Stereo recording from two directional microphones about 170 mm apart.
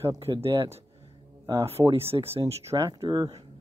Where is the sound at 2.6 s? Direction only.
20° right (ahead or behind).